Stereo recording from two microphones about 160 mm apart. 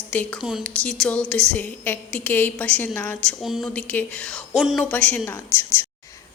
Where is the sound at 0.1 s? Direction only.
10° left (ahead or behind).